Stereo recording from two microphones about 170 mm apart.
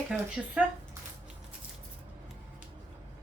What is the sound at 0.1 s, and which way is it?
Speech, 5° right (ahead or behind).